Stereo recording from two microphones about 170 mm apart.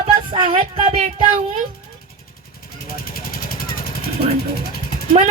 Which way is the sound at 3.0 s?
60° left (ahead or behind).